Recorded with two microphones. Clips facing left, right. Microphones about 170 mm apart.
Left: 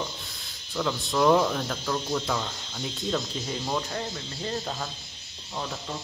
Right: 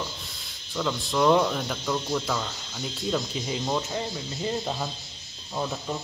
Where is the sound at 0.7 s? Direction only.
Centre (ahead or behind).